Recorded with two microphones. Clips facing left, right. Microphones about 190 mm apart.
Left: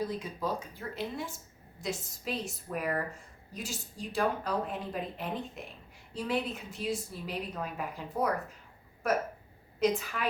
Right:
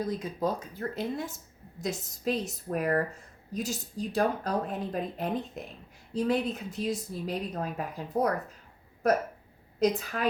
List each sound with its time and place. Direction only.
0.2 s speech: 40° right (ahead or behind)